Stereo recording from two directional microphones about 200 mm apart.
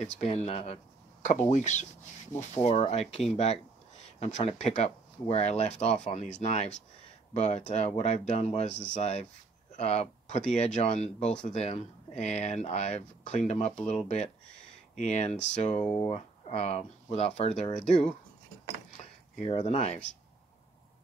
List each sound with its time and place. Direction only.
0.0 s speech: 35° left (ahead or behind)
19.0 s cutlery: 35° left (ahead or behind)
19.4 s speech: 30° left (ahead or behind)